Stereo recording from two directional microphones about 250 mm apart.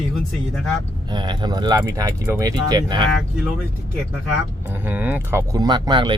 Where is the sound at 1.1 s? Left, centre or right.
Centre.